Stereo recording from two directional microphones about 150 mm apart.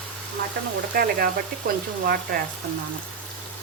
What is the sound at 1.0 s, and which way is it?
Speech, 75° right (ahead or behind).